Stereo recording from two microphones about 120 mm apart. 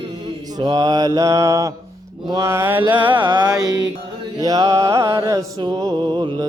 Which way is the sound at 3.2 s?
35° right (ahead or behind).